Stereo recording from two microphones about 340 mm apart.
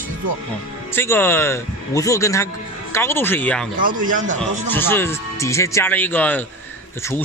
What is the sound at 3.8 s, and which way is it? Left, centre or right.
Speech, right.